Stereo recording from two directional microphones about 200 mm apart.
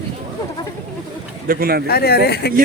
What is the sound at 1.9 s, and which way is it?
Speech, 50° left (ahead or behind).